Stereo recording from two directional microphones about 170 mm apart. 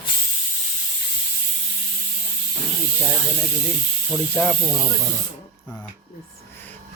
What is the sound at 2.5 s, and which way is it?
Hiss, 5° left (ahead or behind).